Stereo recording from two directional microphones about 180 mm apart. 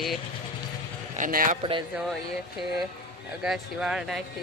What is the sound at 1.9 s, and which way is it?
Speech, 5° right (ahead or behind).